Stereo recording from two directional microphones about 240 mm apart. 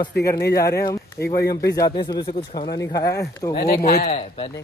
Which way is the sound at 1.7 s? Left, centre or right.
Centre.